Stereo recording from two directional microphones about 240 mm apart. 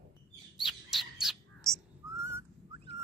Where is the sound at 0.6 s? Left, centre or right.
Centre.